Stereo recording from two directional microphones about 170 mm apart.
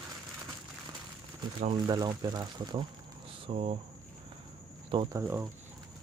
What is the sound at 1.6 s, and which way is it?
Speech, 30° right (ahead or behind).